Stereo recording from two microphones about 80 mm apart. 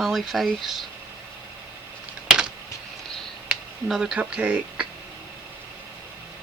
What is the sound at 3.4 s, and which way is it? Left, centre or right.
Speech, centre.